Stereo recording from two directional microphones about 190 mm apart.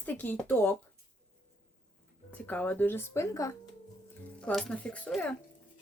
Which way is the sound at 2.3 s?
5° left (ahead or behind).